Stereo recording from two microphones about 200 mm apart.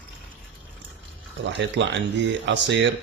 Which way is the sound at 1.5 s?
65° right (ahead or behind).